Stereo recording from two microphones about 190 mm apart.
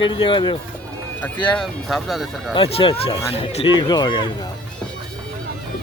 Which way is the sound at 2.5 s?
30° left (ahead or behind).